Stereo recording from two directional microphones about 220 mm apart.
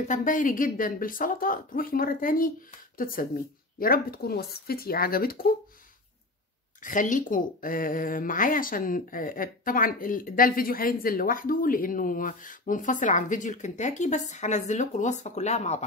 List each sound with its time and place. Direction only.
0.1 s speech: 35° left (ahead or behind)
3.8 s speech: 40° left (ahead or behind)
6.8 s speech: 35° left (ahead or behind)